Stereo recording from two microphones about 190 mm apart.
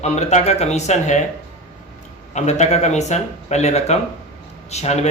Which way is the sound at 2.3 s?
35° left (ahead or behind).